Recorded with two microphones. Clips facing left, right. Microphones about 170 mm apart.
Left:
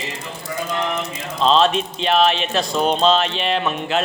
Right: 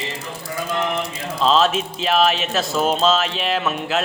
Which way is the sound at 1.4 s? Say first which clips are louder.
Left 1 dB; 5° right (ahead or behind).